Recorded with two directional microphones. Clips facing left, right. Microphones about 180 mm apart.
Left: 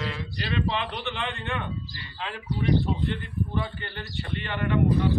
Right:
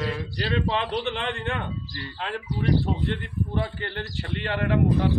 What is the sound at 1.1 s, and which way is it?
A man's voice, 55° right (ahead or behind).